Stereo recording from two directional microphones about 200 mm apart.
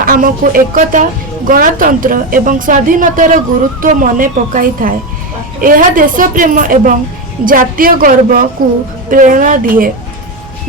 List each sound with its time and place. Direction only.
0.0 s a woman's voice: 45° right (ahead or behind)